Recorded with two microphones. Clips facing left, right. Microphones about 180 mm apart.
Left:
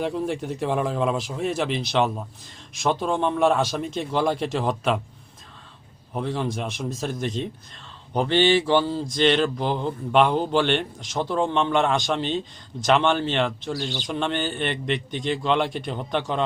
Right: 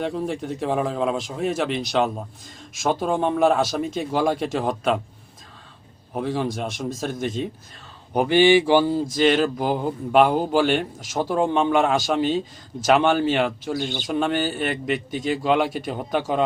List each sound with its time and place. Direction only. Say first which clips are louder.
0.0 s a man's voice: even; centre (ahead or behind)
6.1 s a man's voice: right 2 dB; 5° right (ahead or behind)
13.7 s speech: right 3 dB; 50° right (ahead or behind)
14.1 s a man's voice: right 4 dB; 5° right (ahead or behind)